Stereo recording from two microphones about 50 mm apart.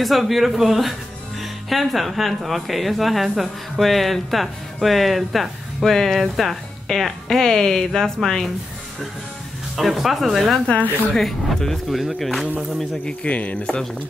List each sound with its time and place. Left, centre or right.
0.0 s speech: centre
9.8 s speech: centre
13.2 s speech: left